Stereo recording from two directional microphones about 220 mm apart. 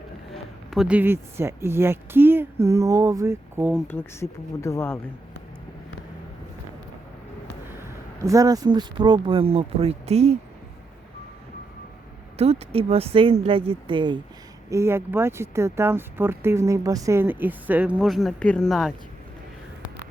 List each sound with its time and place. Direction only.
0.7 s speech: 5° right (ahead or behind)
3.8 s speech: 10° left (ahead or behind)
7.8 s speech: 15° right (ahead or behind)
12.4 s speech: 30° right (ahead or behind); by 18.9 s centre (ahead or behind)